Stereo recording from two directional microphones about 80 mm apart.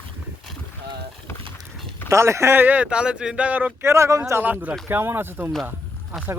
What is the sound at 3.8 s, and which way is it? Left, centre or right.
Speech, right.